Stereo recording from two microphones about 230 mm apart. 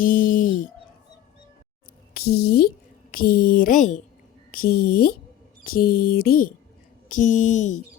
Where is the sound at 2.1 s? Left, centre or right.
Left.